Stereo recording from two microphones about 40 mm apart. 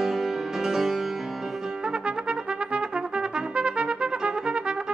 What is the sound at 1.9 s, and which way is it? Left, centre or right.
Trumpet, right.